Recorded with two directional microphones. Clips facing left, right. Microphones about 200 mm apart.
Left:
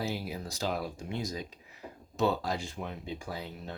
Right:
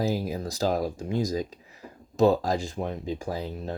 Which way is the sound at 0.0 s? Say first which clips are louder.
Right 8 dB; 40° right (ahead or behind).